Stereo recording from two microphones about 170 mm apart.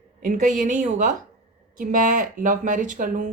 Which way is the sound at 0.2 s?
50° right (ahead or behind).